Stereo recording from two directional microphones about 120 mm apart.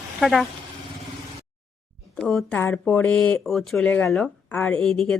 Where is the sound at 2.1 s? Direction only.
5° left (ahead or behind).